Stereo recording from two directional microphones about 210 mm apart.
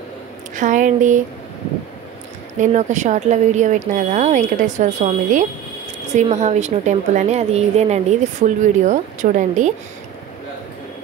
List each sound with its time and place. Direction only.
0.6 s a woman's voice: 35° right (ahead or behind)
2.6 s a woman's voice: 35° right (ahead or behind)